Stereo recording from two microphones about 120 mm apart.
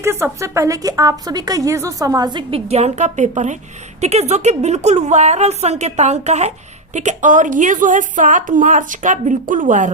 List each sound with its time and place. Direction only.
0.0 s a woman's voice: 25° right (ahead or behind)
2.5 s a woman's voice: 60° right (ahead or behind); by 3.6 s 85° right
4.0 s a woman's voice: 65° right (ahead or behind)
6.9 s a woman's voice: 80° right